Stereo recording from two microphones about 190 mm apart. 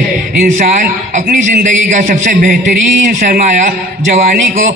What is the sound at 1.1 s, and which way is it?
A man's voice, 45° right (ahead or behind).